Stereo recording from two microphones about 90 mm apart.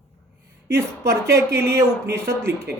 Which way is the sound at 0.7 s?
35° right (ahead or behind).